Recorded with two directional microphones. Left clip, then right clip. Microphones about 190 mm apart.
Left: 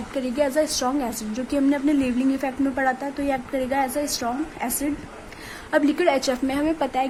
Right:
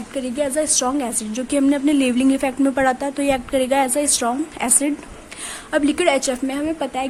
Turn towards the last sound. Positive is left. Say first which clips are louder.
# even
turn(degrees=-20)  # may be behind; listen again after turning